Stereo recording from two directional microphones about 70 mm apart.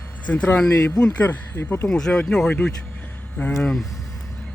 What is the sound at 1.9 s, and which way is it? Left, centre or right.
Speech, centre.